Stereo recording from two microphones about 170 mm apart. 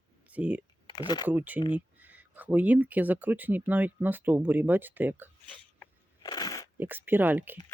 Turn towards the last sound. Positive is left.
turn(degrees=-10)  # may be behind; listen again after turning